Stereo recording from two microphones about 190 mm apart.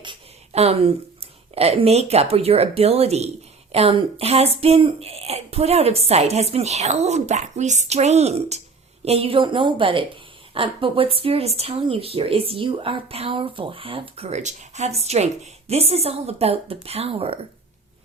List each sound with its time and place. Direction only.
0.0 s speech: 30° right (ahead or behind)